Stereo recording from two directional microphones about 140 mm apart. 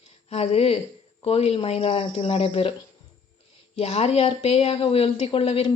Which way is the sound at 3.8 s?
45° left (ahead or behind).